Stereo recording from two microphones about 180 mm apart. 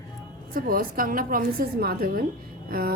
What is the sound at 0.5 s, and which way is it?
A woman's voice, 55° right (ahead or behind).